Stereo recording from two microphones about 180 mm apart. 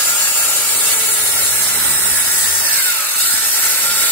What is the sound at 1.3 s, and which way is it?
Steam, 10° left (ahead or behind).